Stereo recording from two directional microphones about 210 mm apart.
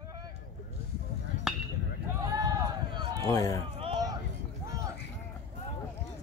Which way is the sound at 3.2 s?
15° left (ahead or behind).